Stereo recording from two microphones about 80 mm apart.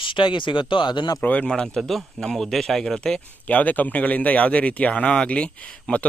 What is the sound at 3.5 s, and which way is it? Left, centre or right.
Speech, centre.